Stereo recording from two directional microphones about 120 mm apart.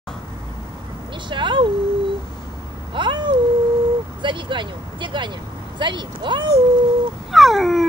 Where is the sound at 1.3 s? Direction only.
40° right (ahead or behind).